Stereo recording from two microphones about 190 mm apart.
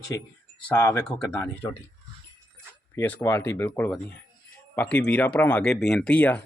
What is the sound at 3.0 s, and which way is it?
Speech, 10° left (ahead or behind).